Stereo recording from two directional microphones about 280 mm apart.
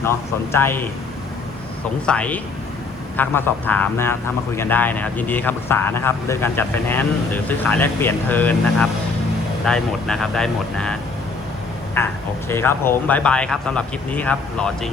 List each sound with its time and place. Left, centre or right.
0.5 s a man's voice: centre
2.0 s a man's voice: centre
12.0 s a man's voice: centre